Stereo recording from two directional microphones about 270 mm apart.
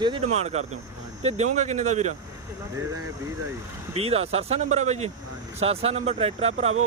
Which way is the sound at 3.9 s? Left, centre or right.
Right.